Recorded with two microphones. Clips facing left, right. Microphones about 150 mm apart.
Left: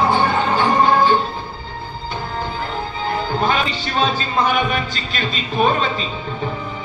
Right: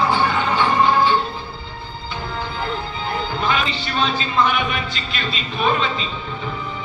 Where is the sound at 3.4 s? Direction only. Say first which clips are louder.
Left 1 dB; 40° left (ahead or behind).